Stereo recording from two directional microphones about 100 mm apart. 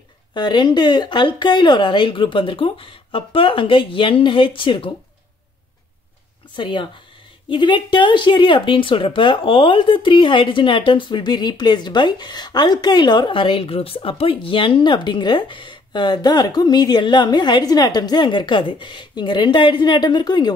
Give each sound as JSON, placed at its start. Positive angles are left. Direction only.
{"t": 0.3, "sound": "speech", "side_deg": 50}
{"t": 6.5, "sound": "speech", "side_deg": 50}